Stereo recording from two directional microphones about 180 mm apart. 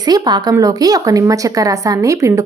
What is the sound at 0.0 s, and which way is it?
A woman's voice, 25° right (ahead or behind).